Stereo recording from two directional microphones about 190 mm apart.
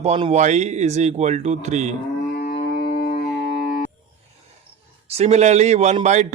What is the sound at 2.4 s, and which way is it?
Music, 55° left (ahead or behind).